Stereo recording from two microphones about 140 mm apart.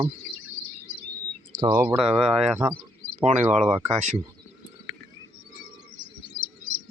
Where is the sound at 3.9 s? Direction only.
55° right (ahead or behind).